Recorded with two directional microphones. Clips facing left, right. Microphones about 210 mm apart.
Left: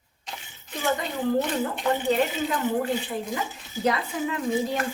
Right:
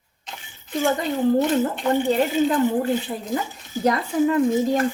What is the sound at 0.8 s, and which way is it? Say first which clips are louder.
Speech: right 6 dB; 40° right (ahead or behind).